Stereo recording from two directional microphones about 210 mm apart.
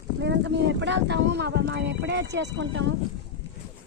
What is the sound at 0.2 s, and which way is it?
Speech, 55° right (ahead or behind).